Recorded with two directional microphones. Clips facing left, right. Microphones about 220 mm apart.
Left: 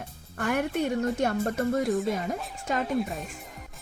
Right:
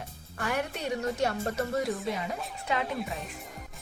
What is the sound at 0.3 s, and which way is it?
Speech, 50° left (ahead or behind).